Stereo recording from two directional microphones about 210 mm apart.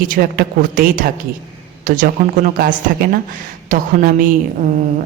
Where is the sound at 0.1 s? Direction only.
45° right (ahead or behind).